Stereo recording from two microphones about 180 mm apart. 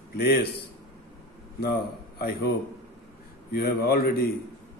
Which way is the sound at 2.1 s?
60° left (ahead or behind).